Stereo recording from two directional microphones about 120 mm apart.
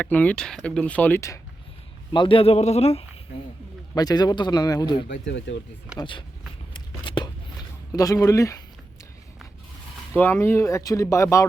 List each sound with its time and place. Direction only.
0.0 s speech: 15° left (ahead or behind)
2.1 s a man's voice: 45° left (ahead or behind); by 3.0 s 60° left (ahead or behind)
3.9 s speech: 35° left (ahead or behind)
6.0 s speech: 45° left (ahead or behind)
7.0 s a sound: 40° left (ahead or behind)
10.2 s speech: 20° left (ahead or behind)